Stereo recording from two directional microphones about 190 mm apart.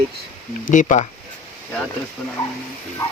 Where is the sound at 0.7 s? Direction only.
40° left (ahead or behind).